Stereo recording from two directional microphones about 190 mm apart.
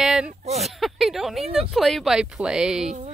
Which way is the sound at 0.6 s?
Centre (ahead or behind).